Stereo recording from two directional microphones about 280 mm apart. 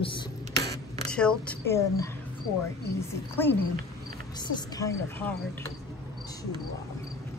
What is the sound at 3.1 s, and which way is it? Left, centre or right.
Speech, centre.